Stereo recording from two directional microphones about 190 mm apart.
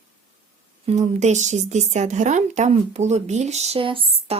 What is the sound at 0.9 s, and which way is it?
A woman's voice, 35° right (ahead or behind).